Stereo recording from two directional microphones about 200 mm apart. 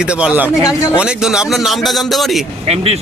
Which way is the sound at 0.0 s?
5° right (ahead or behind).